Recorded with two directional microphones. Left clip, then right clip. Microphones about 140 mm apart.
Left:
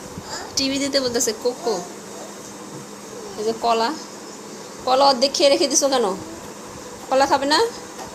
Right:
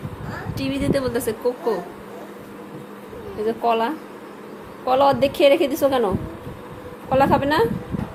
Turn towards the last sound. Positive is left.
turn(degrees=-10)  # may be behind; listen again after turning